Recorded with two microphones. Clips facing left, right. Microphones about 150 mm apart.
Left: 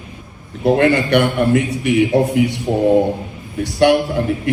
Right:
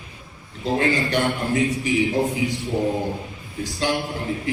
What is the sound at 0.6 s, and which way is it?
A man's voice, 65° left (ahead or behind).